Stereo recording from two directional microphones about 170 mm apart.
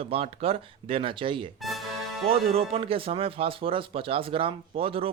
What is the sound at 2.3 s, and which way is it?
Speech, 35° right (ahead or behind).